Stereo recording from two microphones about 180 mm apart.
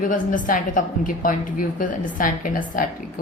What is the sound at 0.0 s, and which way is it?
Speech, 45° left (ahead or behind).